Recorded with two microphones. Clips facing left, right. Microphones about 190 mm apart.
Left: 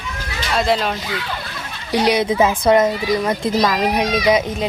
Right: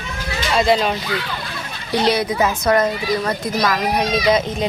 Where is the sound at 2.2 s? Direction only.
25° left (ahead or behind).